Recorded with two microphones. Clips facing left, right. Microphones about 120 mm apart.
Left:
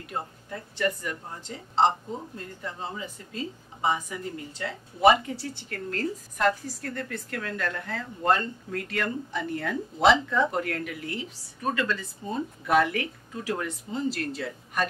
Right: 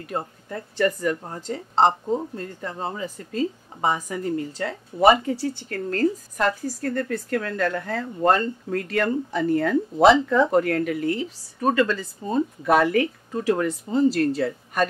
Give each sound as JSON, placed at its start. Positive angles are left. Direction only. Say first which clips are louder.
{"t": 0.0, "sound": "a woman's voice", "louder": "right 5 dB", "side_deg": -45}